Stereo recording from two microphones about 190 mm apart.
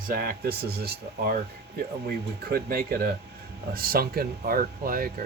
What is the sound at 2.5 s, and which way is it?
Speech, 50° right (ahead or behind).